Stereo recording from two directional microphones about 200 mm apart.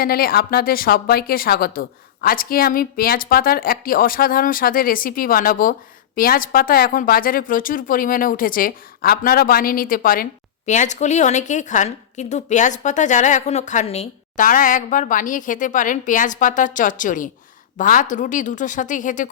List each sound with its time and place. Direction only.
0.0 s a woman's voice: 50° left (ahead or behind)